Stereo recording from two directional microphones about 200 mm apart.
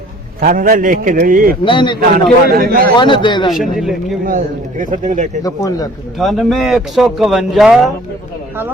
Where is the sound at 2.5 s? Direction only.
45° right (ahead or behind).